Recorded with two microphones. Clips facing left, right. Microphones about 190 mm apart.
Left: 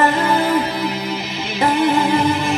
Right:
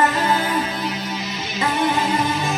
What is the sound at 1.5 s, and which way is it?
Music, 60° left (ahead or behind).